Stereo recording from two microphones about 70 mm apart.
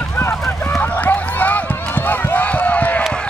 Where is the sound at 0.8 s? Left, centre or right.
Left.